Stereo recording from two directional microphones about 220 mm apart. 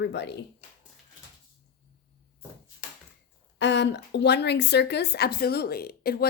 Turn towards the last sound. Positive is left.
turn(degrees=45)  # may be behind; listen again after turning